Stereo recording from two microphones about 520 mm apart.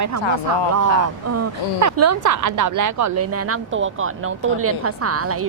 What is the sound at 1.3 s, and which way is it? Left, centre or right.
Speech, right.